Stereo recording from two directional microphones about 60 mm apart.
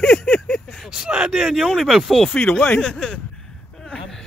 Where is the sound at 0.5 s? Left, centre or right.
Centre.